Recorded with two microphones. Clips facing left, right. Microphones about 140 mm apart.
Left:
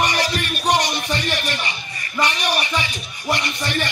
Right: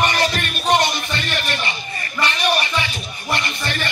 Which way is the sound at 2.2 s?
15° left (ahead or behind).